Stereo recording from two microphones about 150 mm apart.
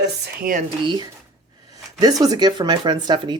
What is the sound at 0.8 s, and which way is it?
Speech, 30° right (ahead or behind).